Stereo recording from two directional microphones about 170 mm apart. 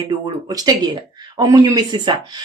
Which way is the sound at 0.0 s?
25° right (ahead or behind).